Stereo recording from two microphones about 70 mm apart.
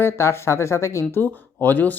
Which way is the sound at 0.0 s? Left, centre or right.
Left.